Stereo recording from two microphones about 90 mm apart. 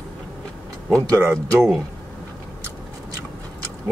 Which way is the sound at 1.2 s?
35° right (ahead or behind).